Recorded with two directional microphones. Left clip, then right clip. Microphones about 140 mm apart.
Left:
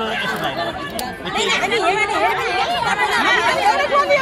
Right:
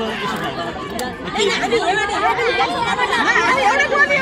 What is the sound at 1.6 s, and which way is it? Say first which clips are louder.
Speech: even; 15° left (ahead or behind).